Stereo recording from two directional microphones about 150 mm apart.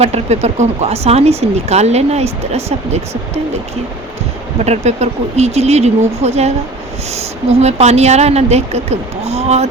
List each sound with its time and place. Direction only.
0.0 s speech: 45° right (ahead or behind)
4.6 s speech: 45° right (ahead or behind)